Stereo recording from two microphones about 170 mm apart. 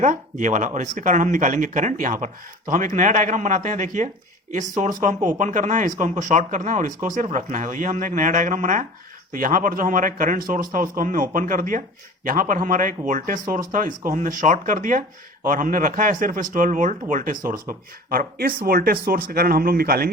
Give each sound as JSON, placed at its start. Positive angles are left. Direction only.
{"t": 0.0, "sound": "speech", "side_deg": -45}